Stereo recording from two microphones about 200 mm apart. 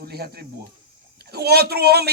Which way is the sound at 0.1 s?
50° right (ahead or behind).